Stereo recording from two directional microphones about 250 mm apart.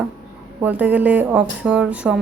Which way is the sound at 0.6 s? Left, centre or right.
Centre.